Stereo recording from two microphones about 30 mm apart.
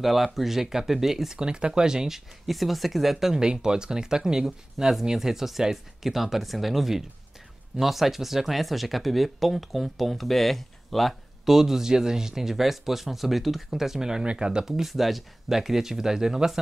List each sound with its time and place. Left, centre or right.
0.0 s speech: centre
1.4 s speech: right; by 2.5 s centre
2.5 s speech: centre
3.3 s speech: right; by 11.1 s centre
11.4 s speech: centre
14.4 s speech: right
14.7 s speech: centre